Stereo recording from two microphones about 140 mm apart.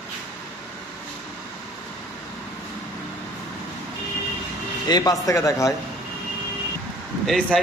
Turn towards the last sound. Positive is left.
turn(degrees=5)  # may be behind; listen again after turning